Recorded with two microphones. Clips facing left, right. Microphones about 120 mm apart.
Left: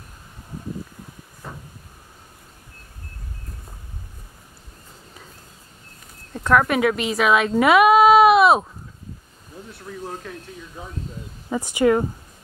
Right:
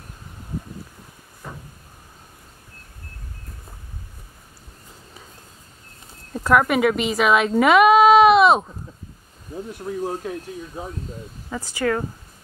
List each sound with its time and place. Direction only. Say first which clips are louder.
6.3 s speech: right 1 dB; 5° right (ahead or behind)
9.9 s speech: right 7 dB; 25° right (ahead or behind)
11.5 s speech: left 5 dB; 20° left (ahead or behind)